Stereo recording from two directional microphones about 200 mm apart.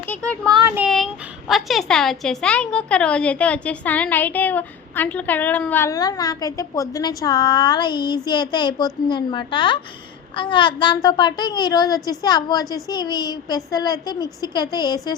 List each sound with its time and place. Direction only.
0.0 s a woman's voice: 5° left (ahead or behind)